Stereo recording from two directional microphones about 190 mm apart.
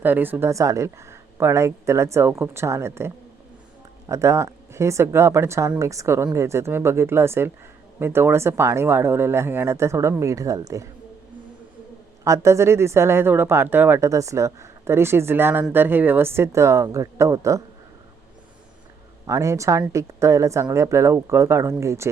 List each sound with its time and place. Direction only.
0.0 s speech: 10° right (ahead or behind)
4.1 s speech: 15° right (ahead or behind)
12.2 s speech: 15° right (ahead or behind)
19.3 s speech: 15° right (ahead or behind)